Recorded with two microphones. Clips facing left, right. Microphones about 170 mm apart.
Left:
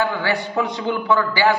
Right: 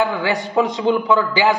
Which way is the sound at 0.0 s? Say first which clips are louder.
Right 2 dB; 20° right (ahead or behind).